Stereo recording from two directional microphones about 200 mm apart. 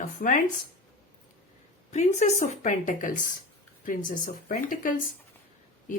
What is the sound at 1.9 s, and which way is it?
A woman's voice, 35° left (ahead or behind).